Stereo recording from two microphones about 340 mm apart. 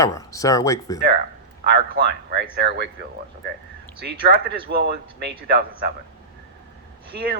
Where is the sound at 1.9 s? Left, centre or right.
Right.